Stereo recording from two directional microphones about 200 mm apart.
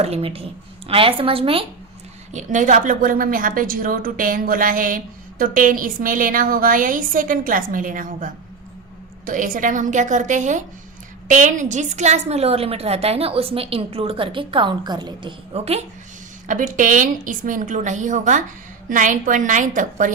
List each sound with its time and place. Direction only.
0.0 s a woman's voice: 30° right (ahead or behind)